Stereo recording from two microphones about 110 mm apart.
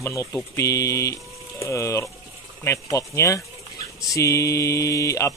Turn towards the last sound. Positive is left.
turn(degrees=30)  # may be behind; listen again after turning